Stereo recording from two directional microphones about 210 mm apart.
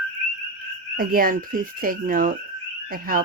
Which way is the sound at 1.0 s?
40° right (ahead or behind).